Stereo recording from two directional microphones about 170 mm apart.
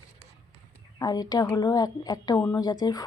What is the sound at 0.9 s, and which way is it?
Speech, 25° left (ahead or behind).